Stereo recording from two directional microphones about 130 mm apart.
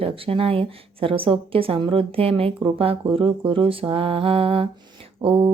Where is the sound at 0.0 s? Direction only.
45° right (ahead or behind).